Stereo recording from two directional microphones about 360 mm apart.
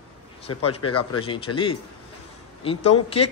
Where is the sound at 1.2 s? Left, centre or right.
Centre.